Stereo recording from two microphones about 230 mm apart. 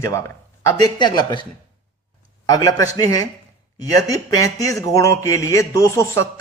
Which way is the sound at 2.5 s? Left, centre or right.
Centre.